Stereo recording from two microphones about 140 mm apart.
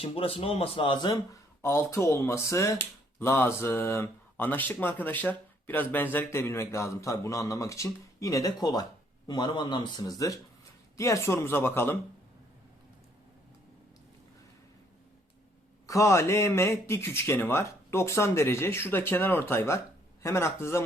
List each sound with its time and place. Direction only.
0.0 s speech: 40° left (ahead or behind)
1.1 s a man's voice: 20° left (ahead or behind)
15.9 s a man's voice: 20° left (ahead or behind)